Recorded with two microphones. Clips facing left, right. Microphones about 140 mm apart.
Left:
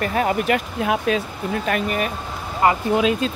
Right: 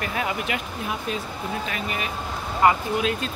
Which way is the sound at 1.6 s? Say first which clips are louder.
Left 7 dB; 50° left (ahead or behind).